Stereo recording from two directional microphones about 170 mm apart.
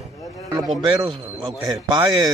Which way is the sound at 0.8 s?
30° right (ahead or behind).